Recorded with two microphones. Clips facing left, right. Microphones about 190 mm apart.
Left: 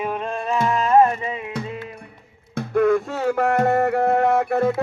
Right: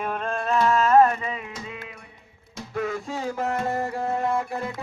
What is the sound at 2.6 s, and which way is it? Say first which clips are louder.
Music: left 11 dB; 55° left (ahead or behind).